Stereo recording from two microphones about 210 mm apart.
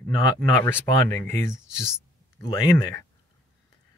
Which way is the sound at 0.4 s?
10° left (ahead or behind).